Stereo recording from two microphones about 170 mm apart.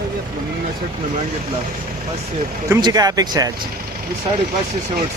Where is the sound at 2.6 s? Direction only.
20° right (ahead or behind).